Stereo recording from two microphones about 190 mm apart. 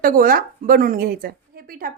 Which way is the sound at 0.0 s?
45° right (ahead or behind).